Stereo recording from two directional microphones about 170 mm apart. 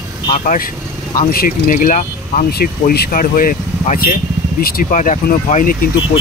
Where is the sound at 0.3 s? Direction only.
50° left (ahead or behind).